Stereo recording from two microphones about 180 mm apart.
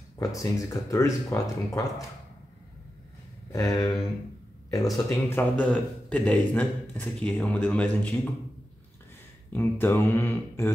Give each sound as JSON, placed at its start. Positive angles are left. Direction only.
{"t": 0.2, "sound": "speech", "side_deg": 20}
{"t": 3.5, "sound": "a sound", "side_deg": 20}
{"t": 4.9, "sound": "speech", "side_deg": 10}
{"t": 9.5, "sound": "speech", "side_deg": 10}